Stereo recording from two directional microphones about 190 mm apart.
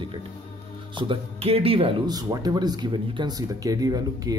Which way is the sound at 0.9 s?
30° right (ahead or behind).